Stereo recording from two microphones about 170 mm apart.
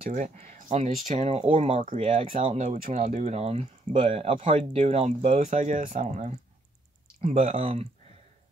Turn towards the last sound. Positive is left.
turn(degrees=-35)  # may be behind; listen again after turning